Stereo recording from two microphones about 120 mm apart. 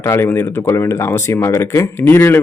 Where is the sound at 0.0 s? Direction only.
20° left (ahead or behind).